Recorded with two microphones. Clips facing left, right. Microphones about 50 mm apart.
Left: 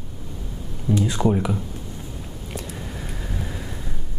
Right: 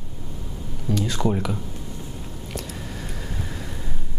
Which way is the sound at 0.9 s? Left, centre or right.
Centre.